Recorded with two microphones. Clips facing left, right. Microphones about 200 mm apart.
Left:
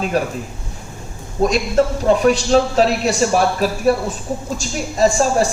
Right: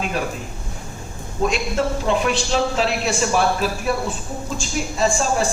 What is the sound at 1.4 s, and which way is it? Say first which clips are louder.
Speech: left 5 dB; 40° left (ahead or behind).